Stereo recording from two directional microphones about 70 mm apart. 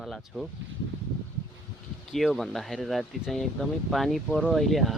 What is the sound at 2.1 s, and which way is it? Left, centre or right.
A man's voice, centre.